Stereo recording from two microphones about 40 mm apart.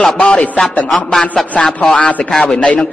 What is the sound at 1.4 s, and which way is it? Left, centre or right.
Speech, centre.